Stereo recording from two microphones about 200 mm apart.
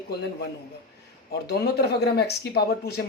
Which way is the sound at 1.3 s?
55° left (ahead or behind).